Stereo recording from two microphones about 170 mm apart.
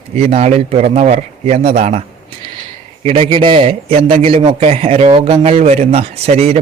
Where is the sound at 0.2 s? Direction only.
40° right (ahead or behind).